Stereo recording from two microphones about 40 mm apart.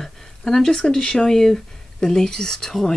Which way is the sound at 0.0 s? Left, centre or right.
Centre.